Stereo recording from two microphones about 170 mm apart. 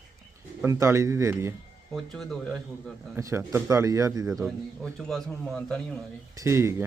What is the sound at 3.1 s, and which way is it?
A man's voice, 15° right (ahead or behind).